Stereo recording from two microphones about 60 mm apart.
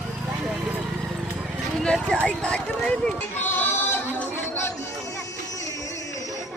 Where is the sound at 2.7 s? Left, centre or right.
Centre.